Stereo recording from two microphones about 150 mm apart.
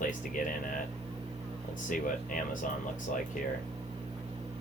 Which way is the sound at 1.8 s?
60° left (ahead or behind).